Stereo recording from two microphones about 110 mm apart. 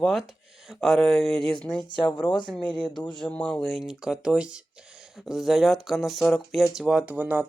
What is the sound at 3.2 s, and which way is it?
Speech, 10° left (ahead or behind).